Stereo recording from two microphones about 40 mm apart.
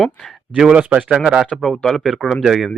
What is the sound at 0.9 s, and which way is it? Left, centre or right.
Speech, right.